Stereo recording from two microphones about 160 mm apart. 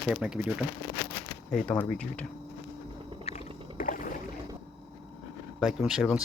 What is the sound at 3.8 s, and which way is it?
Rowboat, 60° left (ahead or behind).